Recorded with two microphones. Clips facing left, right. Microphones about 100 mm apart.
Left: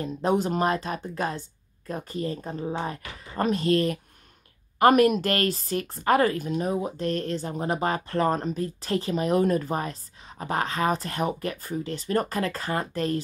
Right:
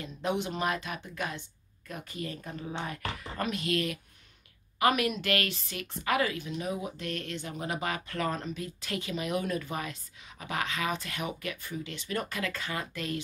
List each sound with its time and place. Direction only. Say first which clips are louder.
0.0 s speech: left 7 dB; 40° left (ahead or behind)